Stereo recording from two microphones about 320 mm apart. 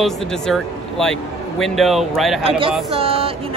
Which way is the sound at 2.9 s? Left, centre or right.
Centre.